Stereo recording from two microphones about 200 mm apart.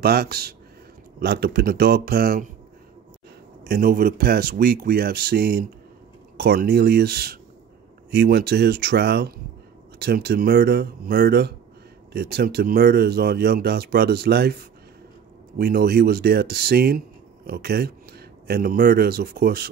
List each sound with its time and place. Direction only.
0.0 s speech: 50° right (ahead or behind)
3.6 s speech: 50° right (ahead or behind)